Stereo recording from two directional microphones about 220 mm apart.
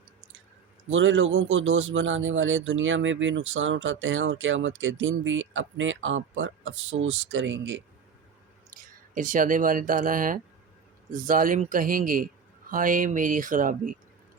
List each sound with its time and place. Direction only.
0.9 s speech: 60° right (ahead or behind)
8.7 s a man's voice: 35° right (ahead or behind)